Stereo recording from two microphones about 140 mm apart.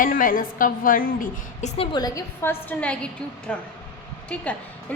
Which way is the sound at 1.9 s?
25° left (ahead or behind).